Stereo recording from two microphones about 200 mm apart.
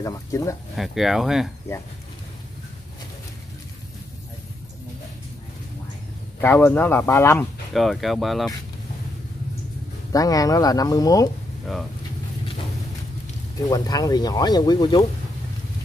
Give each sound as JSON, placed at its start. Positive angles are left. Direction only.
{"t": 0.0, "sound": "speech", "side_deg": 15}
{"t": 0.7, "sound": "speech", "side_deg": 0}
{"t": 6.4, "sound": "speech", "side_deg": 10}
{"t": 7.7, "sound": "speech", "side_deg": 0}
{"t": 10.1, "sound": "speech", "side_deg": 15}
{"t": 13.7, "sound": "speech", "side_deg": 20}